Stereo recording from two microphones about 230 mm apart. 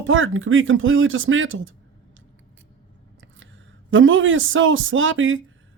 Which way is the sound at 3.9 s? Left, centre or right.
Right.